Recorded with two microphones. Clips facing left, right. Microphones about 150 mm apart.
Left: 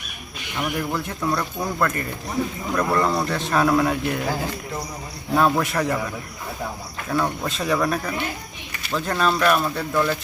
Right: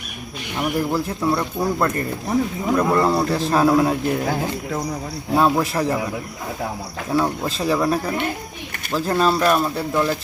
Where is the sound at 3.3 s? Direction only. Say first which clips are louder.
Right 3 dB; 35° right (ahead or behind).